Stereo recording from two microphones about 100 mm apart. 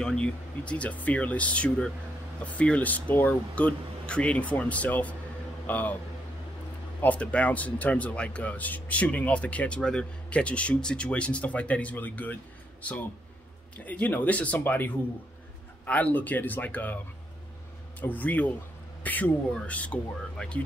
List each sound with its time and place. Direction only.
0.0 s a man's voice: 10° left (ahead or behind)
7.0 s a man's voice: 15° left (ahead or behind)
13.8 s a man's voice: 15° left (ahead or behind)
18.0 s a man's voice: 15° left (ahead or behind)